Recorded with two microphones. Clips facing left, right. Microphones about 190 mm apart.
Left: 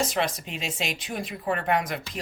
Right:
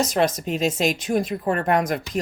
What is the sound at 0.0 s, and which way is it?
Speech, 40° right (ahead or behind).